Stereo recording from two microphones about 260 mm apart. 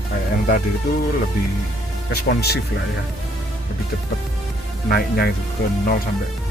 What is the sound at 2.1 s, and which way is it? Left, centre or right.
Speech, left.